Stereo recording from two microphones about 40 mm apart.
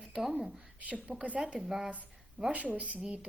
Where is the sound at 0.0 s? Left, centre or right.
Centre.